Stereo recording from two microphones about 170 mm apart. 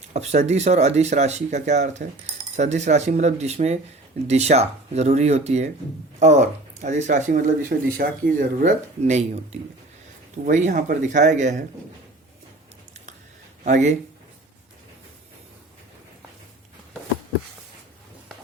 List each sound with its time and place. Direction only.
0.1 s speech: 40° right (ahead or behind)
7.7 s speech: 60° right (ahead or behind)
13.7 s speech: 45° right (ahead or behind)